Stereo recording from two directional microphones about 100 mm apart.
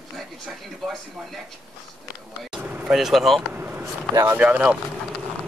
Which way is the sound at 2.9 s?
5° right (ahead or behind).